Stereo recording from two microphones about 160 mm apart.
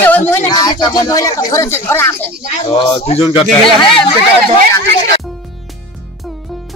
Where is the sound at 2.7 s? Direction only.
35° left (ahead or behind).